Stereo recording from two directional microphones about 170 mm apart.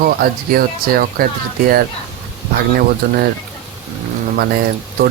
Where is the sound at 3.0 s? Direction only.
65° right (ahead or behind).